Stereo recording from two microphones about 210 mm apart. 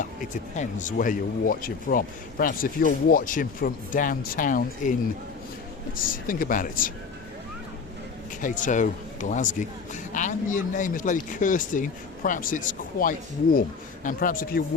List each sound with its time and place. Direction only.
0.5 s a man's voice: 35° left (ahead or behind)
6.0 s a man's voice: 40° left (ahead or behind)
8.4 s a man's voice: 35° left (ahead or behind)